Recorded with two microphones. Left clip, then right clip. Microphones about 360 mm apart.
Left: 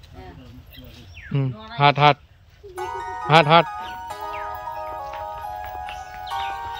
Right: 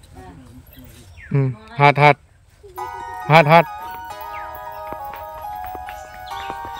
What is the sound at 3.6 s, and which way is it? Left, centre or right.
Music, centre.